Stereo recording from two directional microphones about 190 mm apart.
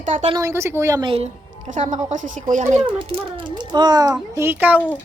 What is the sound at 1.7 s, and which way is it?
A woman's voice, 40° right (ahead or behind).